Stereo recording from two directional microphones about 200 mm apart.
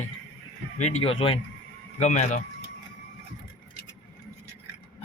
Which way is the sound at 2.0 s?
35° left (ahead or behind).